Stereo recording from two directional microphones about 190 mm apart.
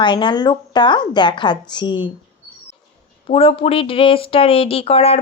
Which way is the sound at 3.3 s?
30° left (ahead or behind).